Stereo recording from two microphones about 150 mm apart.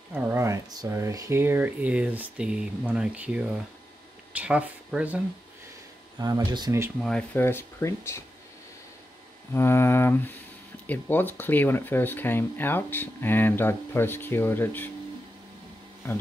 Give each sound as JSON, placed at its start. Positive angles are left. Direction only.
{"t": 0.1, "sound": "speech", "side_deg": -15}
{"t": 6.1, "sound": "speech", "side_deg": -25}
{"t": 7.0, "sound": "speech", "side_deg": 5}
{"t": 7.3, "sound": "speech", "side_deg": 15}
{"t": 9.5, "sound": "speech", "side_deg": 15}